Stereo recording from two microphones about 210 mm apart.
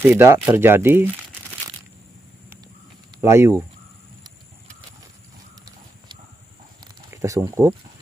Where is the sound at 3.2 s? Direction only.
10° right (ahead or behind).